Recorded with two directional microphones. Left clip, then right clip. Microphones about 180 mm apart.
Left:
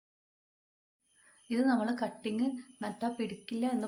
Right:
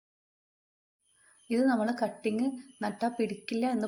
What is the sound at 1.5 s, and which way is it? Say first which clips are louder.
A woman's voice: right 3 dB; 20° right (ahead or behind).